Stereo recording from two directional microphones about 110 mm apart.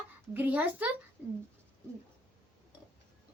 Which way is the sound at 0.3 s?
15° right (ahead or behind).